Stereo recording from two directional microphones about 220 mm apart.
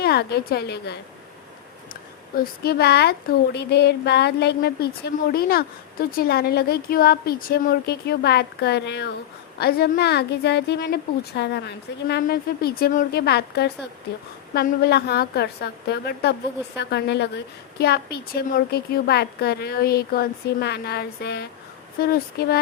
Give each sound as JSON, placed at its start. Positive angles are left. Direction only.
{"t": 0.0, "sound": "a woman's voice", "side_deg": 45}
{"t": 2.4, "sound": "a woman's voice", "side_deg": 45}